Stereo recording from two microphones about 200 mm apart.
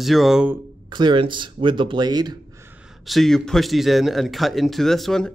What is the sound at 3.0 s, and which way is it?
Speech, centre (ahead or behind).